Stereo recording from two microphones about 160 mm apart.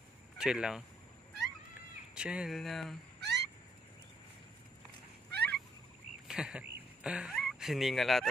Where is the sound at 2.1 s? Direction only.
5° right (ahead or behind).